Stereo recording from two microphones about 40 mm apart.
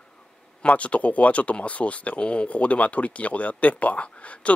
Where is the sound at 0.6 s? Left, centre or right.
Left.